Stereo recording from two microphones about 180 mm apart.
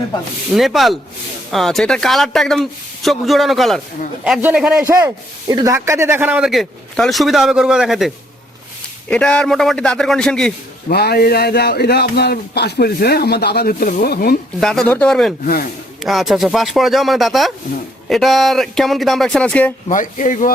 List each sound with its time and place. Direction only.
0.5 s speech: centre (ahead or behind)
4.9 s speech: 15° right (ahead or behind); by 10.5 s 5° left (ahead or behind)
10.8 s a man's voice: 60° left (ahead or behind)
14.6 s speech: 5° left (ahead or behind)
19.9 s speech: 45° left (ahead or behind)